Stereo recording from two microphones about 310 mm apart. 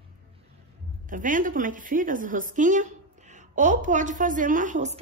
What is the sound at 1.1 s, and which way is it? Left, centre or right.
A woman's voice, right.